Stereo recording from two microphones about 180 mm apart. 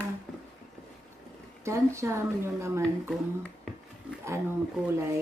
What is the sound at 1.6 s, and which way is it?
Speech, 15° right (ahead or behind).